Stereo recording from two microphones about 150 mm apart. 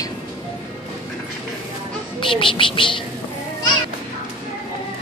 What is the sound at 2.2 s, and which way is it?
Speech, 35° left (ahead or behind).